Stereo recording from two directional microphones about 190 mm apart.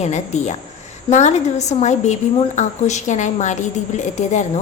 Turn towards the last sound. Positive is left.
turn(degrees=40)  # may be behind; listen again after turning